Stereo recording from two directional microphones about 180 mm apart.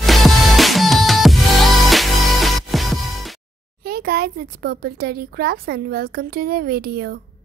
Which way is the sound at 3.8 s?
60° right (ahead or behind).